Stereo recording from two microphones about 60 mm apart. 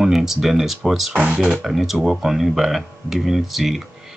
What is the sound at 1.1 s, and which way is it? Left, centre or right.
Speech, centre.